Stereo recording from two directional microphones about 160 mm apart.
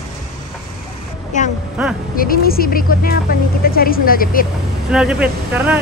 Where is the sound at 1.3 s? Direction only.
50° left (ahead or behind).